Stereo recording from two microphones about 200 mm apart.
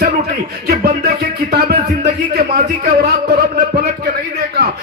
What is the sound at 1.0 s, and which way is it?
Music, 50° right (ahead or behind).